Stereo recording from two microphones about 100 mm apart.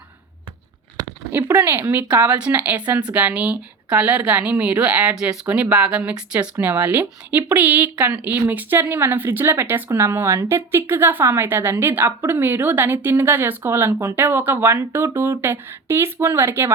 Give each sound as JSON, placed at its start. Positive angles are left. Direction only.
{"t": 1.3, "sound": "speech", "side_deg": -20}